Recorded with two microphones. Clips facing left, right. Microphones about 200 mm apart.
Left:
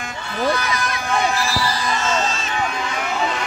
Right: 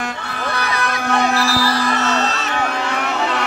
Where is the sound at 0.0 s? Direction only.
65° right (ahead or behind).